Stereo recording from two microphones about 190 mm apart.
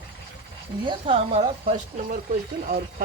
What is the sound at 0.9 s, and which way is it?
Speech, 30° right (ahead or behind).